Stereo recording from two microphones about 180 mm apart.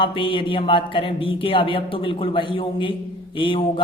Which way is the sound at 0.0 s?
30° left (ahead or behind).